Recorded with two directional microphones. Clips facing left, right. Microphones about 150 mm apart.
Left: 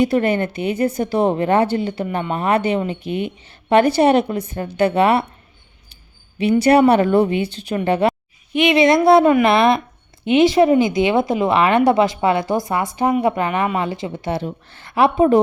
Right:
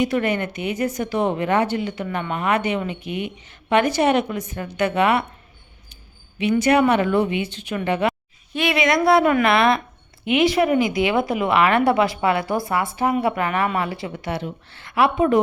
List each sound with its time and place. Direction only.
0.0 s a woman's voice: 35° left (ahead or behind)
6.4 s a woman's voice: 35° left (ahead or behind)
14.4 s a woman's voice: 40° left (ahead or behind)
14.9 s a woman's voice: 30° left (ahead or behind)